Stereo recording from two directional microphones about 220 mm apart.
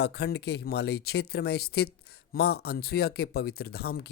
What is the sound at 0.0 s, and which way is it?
Speech, 50° left (ahead or behind).